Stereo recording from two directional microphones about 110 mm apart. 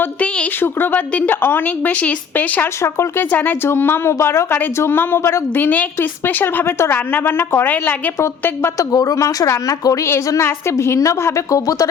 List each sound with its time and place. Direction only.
0.0 s a woman's voice: 15° left (ahead or behind); by 11.9 s 30° left (ahead or behind)